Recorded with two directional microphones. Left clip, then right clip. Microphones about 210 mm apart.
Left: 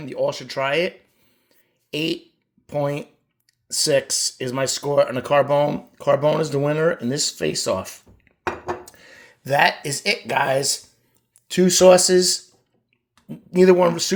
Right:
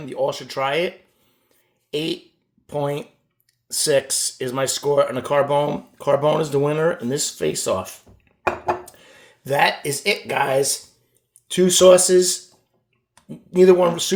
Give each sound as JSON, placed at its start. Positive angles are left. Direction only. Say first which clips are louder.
{"t": 0.0, "sound": "speech", "louder": "even", "side_deg": 20}
{"t": 1.9, "sound": "fart", "louder": "even", "side_deg": 25}
{"t": 2.6, "sound": "speech", "louder": "even", "side_deg": 20}